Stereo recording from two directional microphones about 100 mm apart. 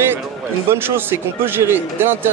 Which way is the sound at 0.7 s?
25° right (ahead or behind).